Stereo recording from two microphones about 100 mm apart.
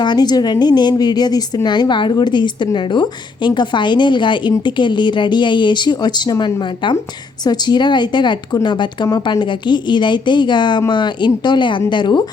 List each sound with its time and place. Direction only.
0.0 s a woman's voice: 45° left (ahead or behind)